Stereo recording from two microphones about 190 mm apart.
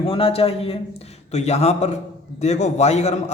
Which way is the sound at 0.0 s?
30° left (ahead or behind).